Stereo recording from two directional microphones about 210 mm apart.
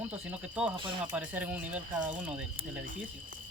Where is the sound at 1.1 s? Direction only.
5° right (ahead or behind).